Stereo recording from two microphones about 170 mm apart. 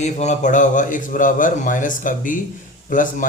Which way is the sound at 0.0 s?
45° left (ahead or behind).